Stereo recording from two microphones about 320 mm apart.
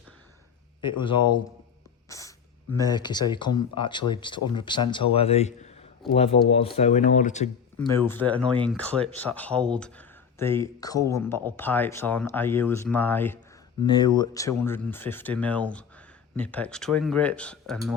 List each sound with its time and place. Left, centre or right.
0.8 s speech: centre
2.0 s a sound: centre
2.7 s speech: centre
7.8 s speech: centre